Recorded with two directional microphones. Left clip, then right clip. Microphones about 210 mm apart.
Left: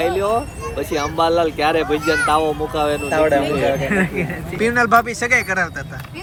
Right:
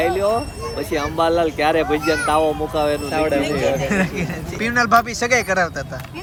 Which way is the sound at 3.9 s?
5° right (ahead or behind).